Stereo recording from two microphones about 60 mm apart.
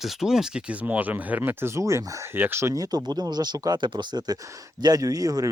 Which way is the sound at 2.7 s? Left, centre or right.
Right.